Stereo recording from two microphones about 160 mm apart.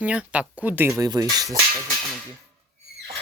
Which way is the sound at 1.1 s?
25° right (ahead or behind).